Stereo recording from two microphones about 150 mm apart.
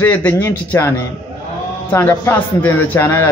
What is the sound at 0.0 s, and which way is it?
A man's voice, 10° left (ahead or behind).